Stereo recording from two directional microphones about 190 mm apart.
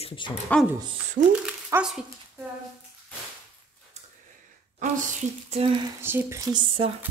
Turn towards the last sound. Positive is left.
turn(degrees=-15)  # may be behind; listen again after turning